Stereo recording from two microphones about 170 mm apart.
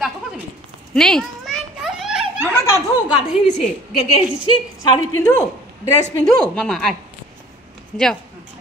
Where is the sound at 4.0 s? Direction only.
40° left (ahead or behind).